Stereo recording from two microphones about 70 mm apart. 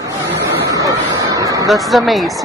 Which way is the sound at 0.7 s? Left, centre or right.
Right.